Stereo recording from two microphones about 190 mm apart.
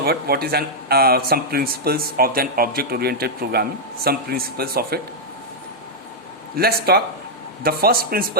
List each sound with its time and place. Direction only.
0.0 s speech: 55° right (ahead or behind)
6.6 s speech: 55° right (ahead or behind)